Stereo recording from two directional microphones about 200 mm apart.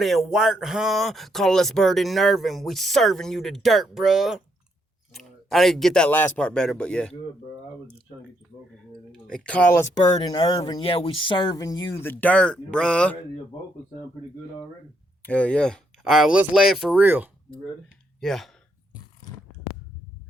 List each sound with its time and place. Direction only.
0.0 s speech: centre (ahead or behind)
9.2 s speech: 5° left (ahead or behind)
10.2 s speech: 20° left (ahead or behind); by 13.1 s 5° left (ahead or behind)
15.2 s speech: 5° left (ahead or behind)